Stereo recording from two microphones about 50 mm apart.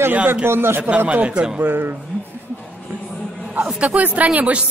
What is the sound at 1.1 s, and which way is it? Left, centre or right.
Speech, right.